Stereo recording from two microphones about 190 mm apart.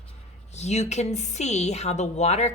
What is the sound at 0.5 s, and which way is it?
A woman's voice, 35° left (ahead or behind).